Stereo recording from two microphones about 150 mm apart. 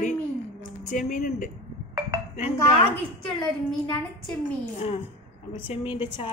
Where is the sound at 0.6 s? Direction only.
55° left (ahead or behind).